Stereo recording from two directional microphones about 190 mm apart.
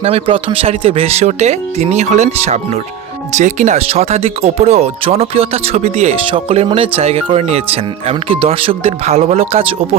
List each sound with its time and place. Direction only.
0.0 s speech: 30° right (ahead or behind)